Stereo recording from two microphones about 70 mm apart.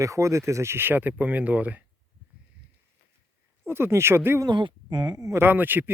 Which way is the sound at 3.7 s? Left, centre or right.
Right.